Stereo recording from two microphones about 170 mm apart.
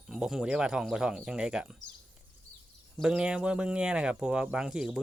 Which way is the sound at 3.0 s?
5° right (ahead or behind).